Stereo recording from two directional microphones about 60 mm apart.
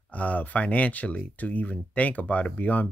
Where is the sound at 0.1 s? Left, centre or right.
Left.